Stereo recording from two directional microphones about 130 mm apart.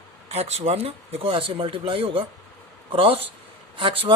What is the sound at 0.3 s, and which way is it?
Speech, 55° right (ahead or behind).